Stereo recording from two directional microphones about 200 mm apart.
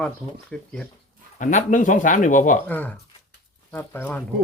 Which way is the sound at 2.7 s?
10° left (ahead or behind).